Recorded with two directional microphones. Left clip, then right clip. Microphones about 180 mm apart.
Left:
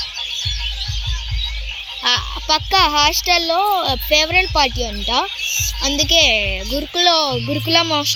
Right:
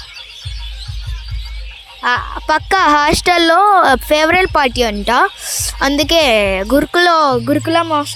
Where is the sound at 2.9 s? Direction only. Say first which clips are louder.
Right 3 dB; 90° right.